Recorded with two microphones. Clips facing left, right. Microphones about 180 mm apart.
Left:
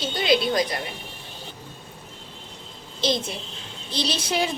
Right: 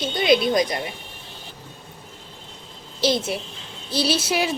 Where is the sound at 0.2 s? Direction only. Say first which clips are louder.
Right 3 dB; 20° right (ahead or behind).